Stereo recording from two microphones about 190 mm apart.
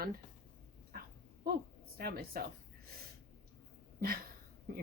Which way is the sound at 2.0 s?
55° right (ahead or behind).